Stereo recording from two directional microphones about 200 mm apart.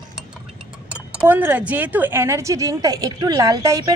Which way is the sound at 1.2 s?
10° right (ahead or behind).